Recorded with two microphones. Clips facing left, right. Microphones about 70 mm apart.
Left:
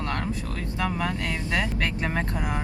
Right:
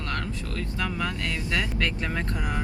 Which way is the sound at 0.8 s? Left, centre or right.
Left.